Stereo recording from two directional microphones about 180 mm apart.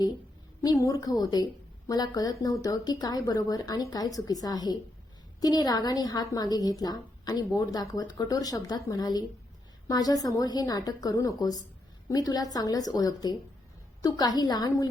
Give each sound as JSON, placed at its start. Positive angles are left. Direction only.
{"t": 0.6, "sound": "a woman's voice", "side_deg": 20}